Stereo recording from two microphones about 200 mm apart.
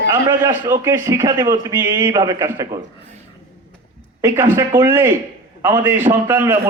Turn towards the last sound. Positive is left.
turn(degrees=-15)  # may be behind; listen again after turning